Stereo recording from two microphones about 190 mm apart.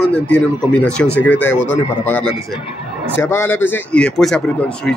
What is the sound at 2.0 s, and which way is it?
Speech, 5° left (ahead or behind).